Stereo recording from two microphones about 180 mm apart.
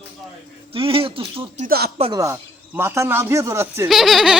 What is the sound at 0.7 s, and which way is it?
Speech, 30° right (ahead or behind).